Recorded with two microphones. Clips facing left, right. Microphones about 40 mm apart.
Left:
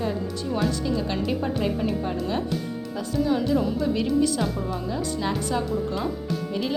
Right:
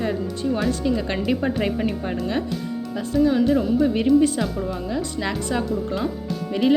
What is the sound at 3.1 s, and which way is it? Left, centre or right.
Speech, right.